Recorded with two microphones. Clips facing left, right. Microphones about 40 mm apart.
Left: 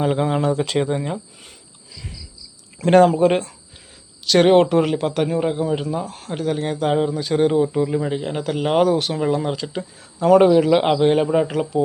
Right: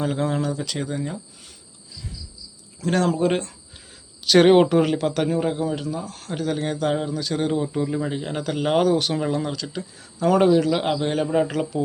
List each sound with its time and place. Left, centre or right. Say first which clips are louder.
0.0 s speech: left 4 dB; left
0.5 s speech: left 7 dB; left
2.7 s speech: left 9 dB; left
3.1 s speech: left 4 dB; centre
5.7 s speech: left 5 dB; left
6.1 s speech: left 2 dB; centre
9.5 s speech: left 4 dB; left
10.0 s speech: left 5 dB; centre